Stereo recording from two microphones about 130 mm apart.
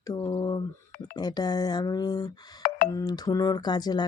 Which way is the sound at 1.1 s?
30° left (ahead or behind).